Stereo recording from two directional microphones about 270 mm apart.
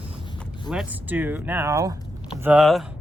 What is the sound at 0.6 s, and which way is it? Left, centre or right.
Speech, centre.